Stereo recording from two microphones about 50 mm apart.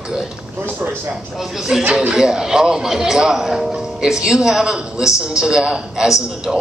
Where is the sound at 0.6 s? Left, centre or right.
Right.